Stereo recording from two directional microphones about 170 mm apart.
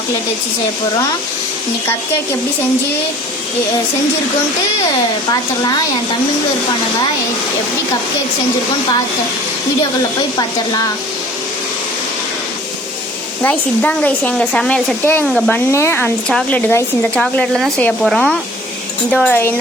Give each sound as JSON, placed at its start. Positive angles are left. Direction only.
{"t": 13.4, "sound": "speech", "side_deg": 10}